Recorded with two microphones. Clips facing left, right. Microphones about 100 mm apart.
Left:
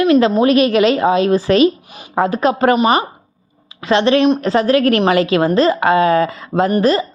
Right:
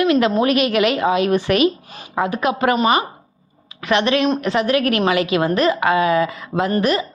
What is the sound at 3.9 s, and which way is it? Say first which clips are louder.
A woman's voice: left 5 dB; 30° left (ahead or behind).